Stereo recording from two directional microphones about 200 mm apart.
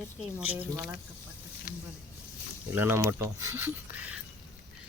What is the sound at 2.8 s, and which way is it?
Speech, 10° right (ahead or behind).